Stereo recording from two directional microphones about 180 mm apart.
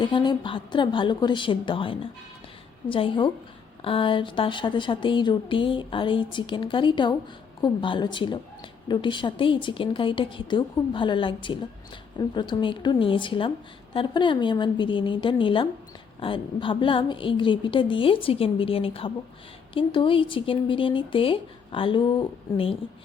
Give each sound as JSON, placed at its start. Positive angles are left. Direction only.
{"t": 0.0, "sound": "speech", "side_deg": 25}